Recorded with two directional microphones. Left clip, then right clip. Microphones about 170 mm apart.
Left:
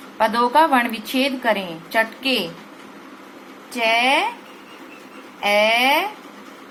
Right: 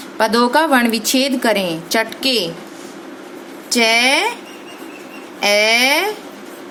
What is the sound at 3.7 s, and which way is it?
Speech, 55° right (ahead or behind).